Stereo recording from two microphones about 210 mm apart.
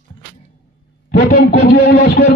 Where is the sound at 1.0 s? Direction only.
40° left (ahead or behind).